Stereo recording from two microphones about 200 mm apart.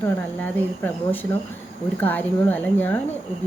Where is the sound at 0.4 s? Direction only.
10° left (ahead or behind).